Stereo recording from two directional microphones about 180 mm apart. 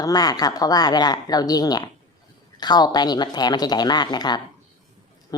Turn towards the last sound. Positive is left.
turn(degrees=25)  # may be behind; listen again after turning